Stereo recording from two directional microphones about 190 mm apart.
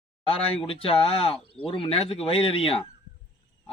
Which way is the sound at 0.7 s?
30° left (ahead or behind).